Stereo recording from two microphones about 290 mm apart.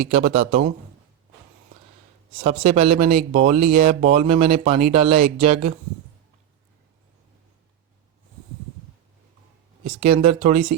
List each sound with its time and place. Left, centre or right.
0.1 s speech: right
2.4 s speech: right
9.8 s speech: right